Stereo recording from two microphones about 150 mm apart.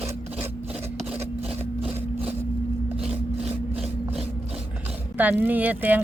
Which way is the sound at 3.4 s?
5° right (ahead or behind).